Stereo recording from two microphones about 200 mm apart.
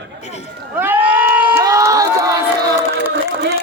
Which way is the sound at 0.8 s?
10° right (ahead or behind).